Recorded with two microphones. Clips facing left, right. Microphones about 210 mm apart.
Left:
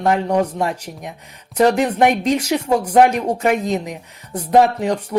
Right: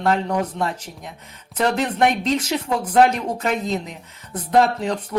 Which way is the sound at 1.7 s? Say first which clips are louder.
Left 4 dB; 10° left (ahead or behind).